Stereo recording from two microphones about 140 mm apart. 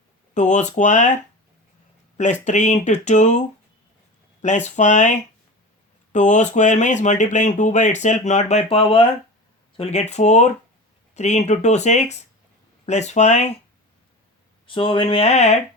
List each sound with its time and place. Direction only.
0.3 s speech: 60° left (ahead or behind)
4.4 s speech: 55° left (ahead or behind)
6.1 s speech: 60° left (ahead or behind)
8.7 s speech: 40° left (ahead or behind)
14.7 s speech: 40° left (ahead or behind)